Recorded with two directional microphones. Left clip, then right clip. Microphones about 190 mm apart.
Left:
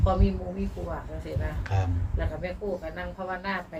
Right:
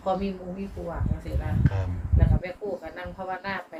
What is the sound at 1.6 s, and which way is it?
Speech, 45° left (ahead or behind).